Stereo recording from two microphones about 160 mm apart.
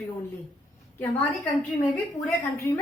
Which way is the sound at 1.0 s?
10° left (ahead or behind).